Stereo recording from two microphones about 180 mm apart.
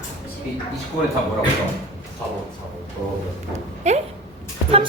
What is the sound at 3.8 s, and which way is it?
Speech, 40° right (ahead or behind).